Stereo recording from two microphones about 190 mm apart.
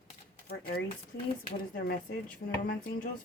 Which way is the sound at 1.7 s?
55° left (ahead or behind).